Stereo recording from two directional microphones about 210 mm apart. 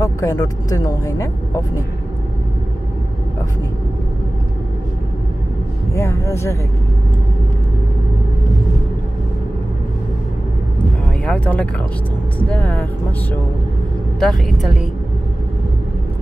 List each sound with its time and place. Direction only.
0.0 s speech: 15° left (ahead or behind)
5.9 s speech: 15° left (ahead or behind)
10.8 s vehicle: 5° left (ahead or behind)
12.4 s speech: 5° left (ahead or behind)
14.2 s a woman's voice: centre (ahead or behind)